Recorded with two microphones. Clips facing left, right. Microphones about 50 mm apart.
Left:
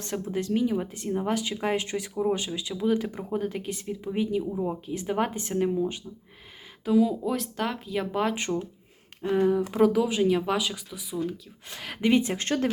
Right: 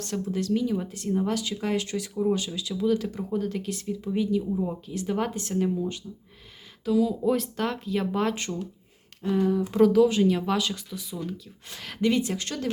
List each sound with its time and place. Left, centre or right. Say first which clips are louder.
0.0 s speech: right 1 dB; left
7.2 s speech: right 3 dB; centre
8.4 s speech: left 3 dB; left
9.7 s speech: right 7 dB; centre; by 12.6 s left